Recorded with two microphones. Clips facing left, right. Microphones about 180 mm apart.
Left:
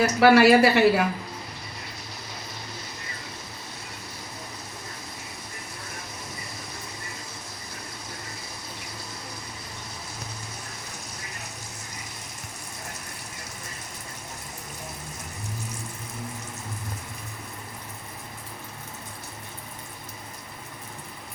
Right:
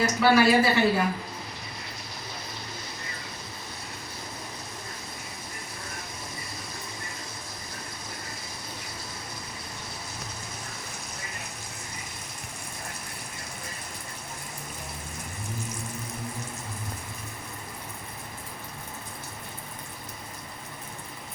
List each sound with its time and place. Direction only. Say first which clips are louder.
0.0 s speech: left 4 dB; 70° left (ahead or behind)